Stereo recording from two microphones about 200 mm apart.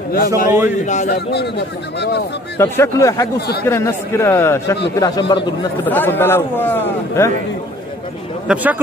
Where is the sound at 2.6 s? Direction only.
10° left (ahead or behind).